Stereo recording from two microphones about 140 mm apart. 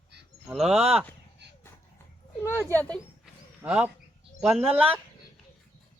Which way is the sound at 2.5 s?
15° left (ahead or behind).